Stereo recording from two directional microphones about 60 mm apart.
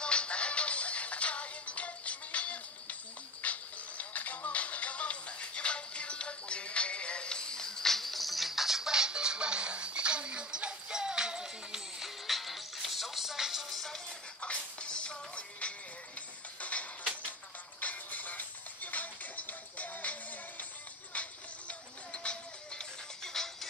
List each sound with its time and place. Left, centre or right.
0.0 s music: centre